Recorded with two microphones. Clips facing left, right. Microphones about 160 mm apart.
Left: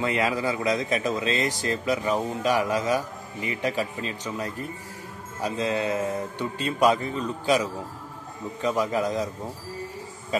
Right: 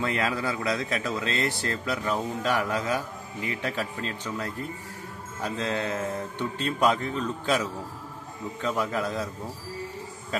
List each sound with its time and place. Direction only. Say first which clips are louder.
0.0 s speech: left 3 dB; 15° left (ahead or behind)
8.6 s speech: left 4 dB; 15° left (ahead or behind)